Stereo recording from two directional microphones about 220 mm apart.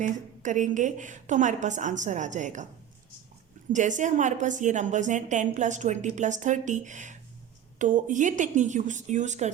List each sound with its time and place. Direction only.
0.0 s a woman's voice: 35° right (ahead or behind)
3.7 s a woman's voice: 35° right (ahead or behind)